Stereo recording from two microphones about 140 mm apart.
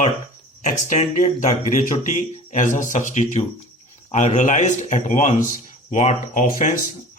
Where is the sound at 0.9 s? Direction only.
55° left (ahead or behind).